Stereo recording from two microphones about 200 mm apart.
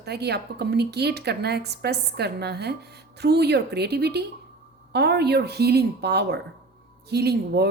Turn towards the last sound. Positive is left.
turn(degrees=-55)  # may be behind; listen again after turning